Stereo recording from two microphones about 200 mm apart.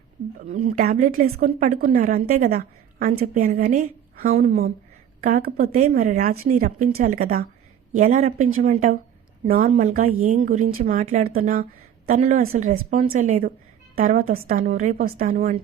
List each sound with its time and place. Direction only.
0.4 s a woman's voice: 45° right (ahead or behind)
5.2 s a woman's voice: 45° right (ahead or behind)